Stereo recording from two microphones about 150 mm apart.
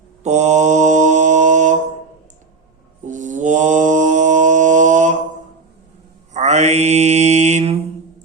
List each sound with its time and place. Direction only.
0.2 s mantra: 50° right (ahead or behind)
3.1 s mantra: 55° right (ahead or behind)
6.3 s mantra: 50° right (ahead or behind)